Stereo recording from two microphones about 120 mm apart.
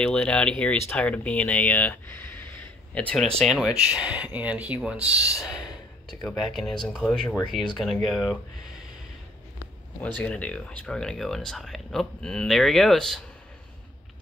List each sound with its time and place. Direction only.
0.0 s speech: 10° left (ahead or behind)
3.3 s speech: centre (ahead or behind)
5.2 s speech: 30° left (ahead or behind)
6.0 s speech: centre (ahead or behind)
10.0 s speech: 10° left (ahead or behind)